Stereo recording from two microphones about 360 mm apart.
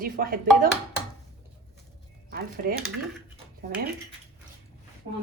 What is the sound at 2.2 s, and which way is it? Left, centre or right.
Speech, right.